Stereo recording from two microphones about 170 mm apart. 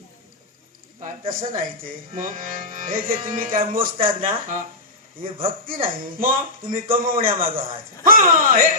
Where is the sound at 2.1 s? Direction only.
55° right (ahead or behind).